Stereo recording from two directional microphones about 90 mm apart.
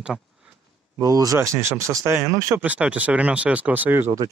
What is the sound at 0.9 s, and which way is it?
Speech, 40° right (ahead or behind).